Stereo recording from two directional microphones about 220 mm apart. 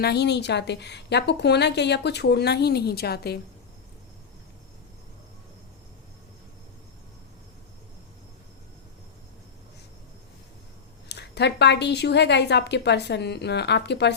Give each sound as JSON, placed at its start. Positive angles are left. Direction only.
{"t": 0.0, "sound": "a woman's voice", "side_deg": 50}
{"t": 11.1, "sound": "a woman's voice", "side_deg": 50}